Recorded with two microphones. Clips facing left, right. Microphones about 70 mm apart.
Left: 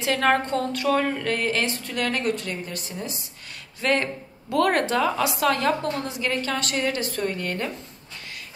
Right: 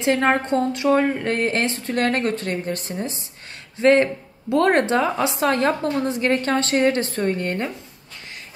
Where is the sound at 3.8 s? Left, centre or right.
Right.